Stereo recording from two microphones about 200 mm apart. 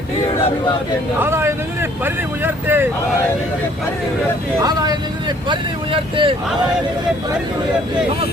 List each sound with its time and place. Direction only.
1.2 s speech: 10° right (ahead or behind)
4.6 s speech: 20° right (ahead or behind)